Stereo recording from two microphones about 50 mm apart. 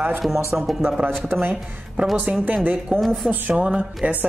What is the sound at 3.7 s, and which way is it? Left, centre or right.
Speech, right.